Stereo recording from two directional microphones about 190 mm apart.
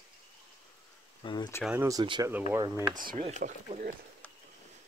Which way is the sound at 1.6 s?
5° right (ahead or behind).